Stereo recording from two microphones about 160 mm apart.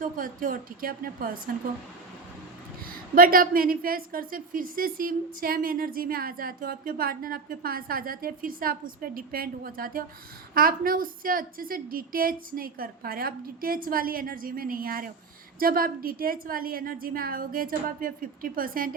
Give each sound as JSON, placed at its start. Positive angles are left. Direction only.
{"t": 0.0, "sound": "a woman's voice", "side_deg": -60}
{"t": 2.8, "sound": "a woman's voice", "side_deg": -65}